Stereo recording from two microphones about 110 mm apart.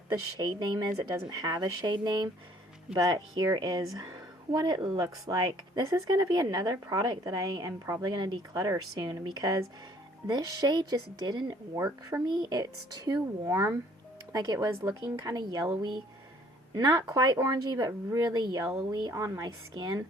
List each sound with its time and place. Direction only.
0.3 s speech: 40° right (ahead or behind)
16.7 s speech: 35° right (ahead or behind)